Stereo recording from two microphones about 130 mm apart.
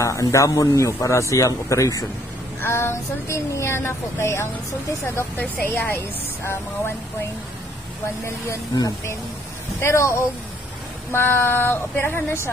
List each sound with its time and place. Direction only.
0.0 s speech: 25° left (ahead or behind)
8.5 s speech: 25° left (ahead or behind)